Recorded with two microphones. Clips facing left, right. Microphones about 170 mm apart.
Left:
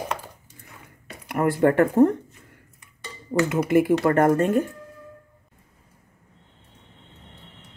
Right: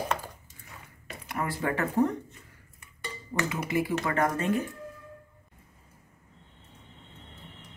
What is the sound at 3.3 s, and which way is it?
Speech, 50° left (ahead or behind).